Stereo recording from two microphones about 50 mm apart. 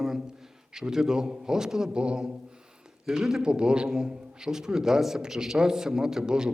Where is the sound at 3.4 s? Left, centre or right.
Centre.